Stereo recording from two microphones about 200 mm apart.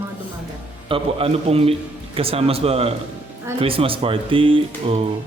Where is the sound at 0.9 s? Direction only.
30° right (ahead or behind).